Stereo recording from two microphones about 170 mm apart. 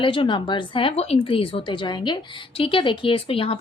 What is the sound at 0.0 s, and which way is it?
Speech, 30° left (ahead or behind).